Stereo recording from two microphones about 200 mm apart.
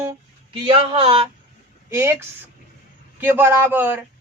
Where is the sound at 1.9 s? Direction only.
10° right (ahead or behind).